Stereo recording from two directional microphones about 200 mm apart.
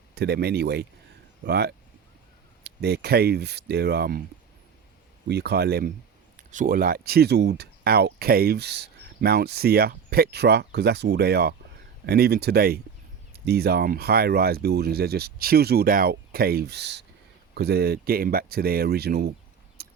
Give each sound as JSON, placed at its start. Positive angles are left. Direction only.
{"t": 0.1, "sound": "speech", "side_deg": -55}
{"t": 5.3, "sound": "speech", "side_deg": -55}
{"t": 6.3, "sound": "speech", "side_deg": -40}
{"t": 19.8, "sound": "a sound", "side_deg": -50}